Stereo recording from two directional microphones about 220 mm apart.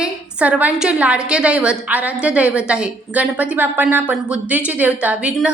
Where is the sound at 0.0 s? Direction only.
5° right (ahead or behind).